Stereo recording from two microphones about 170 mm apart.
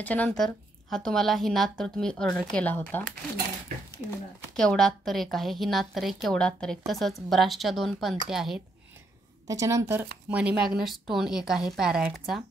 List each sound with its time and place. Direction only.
0.0 s a woman's voice: 10° left (ahead or behind)
4.6 s a woman's voice: 5° left (ahead or behind)
9.5 s speech: 20° right (ahead or behind)
10.3 s a woman's voice: 5° right (ahead or behind)